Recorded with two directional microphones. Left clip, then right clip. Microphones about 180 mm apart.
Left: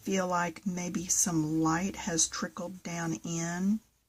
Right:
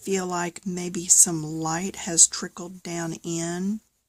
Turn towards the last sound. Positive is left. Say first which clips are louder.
# right 6 dB
turn(degrees=-50)  # may be behind; listen again after turning